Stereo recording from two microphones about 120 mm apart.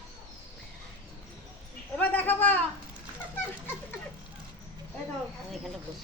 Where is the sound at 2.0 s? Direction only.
15° left (ahead or behind).